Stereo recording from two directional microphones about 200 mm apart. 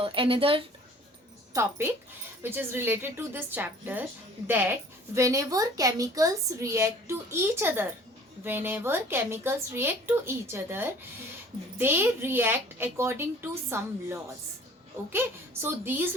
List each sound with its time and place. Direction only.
0.0 s speech: 25° right (ahead or behind)
1.5 s a woman's voice: 15° right (ahead or behind)